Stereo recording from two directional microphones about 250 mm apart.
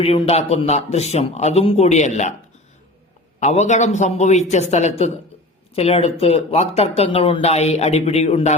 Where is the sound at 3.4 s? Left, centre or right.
Left.